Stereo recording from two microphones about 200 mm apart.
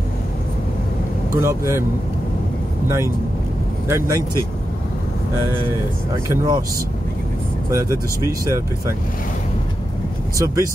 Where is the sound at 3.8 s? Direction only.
15° right (ahead or behind).